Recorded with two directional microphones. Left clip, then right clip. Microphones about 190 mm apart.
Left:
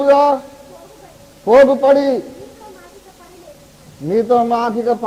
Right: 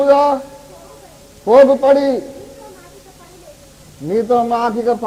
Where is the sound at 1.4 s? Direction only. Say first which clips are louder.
Right 1 dB; 55° right (ahead or behind).